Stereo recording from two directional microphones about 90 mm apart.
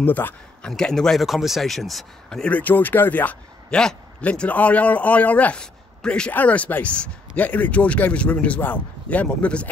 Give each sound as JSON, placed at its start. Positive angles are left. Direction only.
{"t": 0.0, "sound": "speech", "side_deg": 20}
{"t": 0.7, "sound": "speech", "side_deg": 5}